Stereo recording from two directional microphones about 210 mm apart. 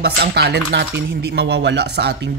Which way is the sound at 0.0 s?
50° right (ahead or behind).